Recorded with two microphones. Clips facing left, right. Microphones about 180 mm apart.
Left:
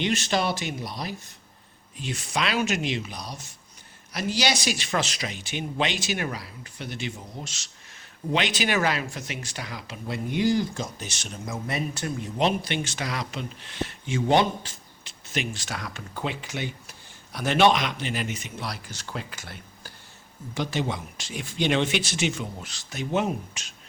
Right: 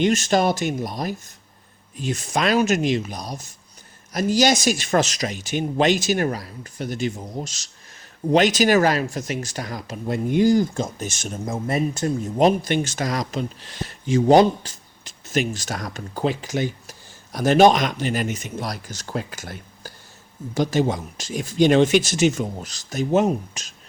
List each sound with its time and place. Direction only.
0.0 s speech: 45° right (ahead or behind)